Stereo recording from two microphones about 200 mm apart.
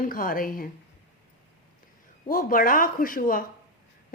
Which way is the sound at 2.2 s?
45° left (ahead or behind).